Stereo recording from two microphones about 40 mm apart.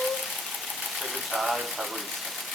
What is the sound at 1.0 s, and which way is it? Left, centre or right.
Speech, centre.